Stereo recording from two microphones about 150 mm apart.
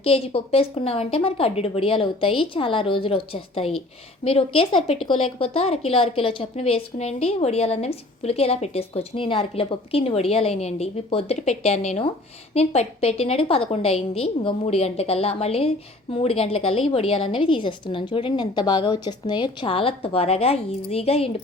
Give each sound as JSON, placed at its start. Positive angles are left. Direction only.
{"t": 0.0, "sound": "a woman's voice", "side_deg": 40}